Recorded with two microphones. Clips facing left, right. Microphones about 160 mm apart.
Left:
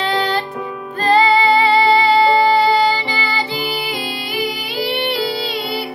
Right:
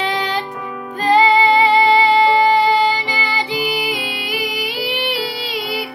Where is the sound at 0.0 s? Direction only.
15° right (ahead or behind).